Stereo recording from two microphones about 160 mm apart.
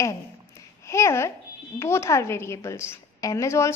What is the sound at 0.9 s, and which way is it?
A child's voice, 15° left (ahead or behind).